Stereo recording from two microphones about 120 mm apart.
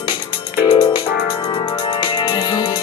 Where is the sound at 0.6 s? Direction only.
40° left (ahead or behind).